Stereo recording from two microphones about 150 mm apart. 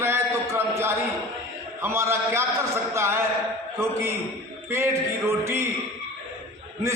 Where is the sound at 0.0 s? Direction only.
15° right (ahead or behind).